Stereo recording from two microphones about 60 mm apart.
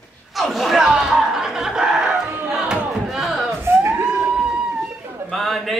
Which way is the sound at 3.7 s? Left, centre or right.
Right.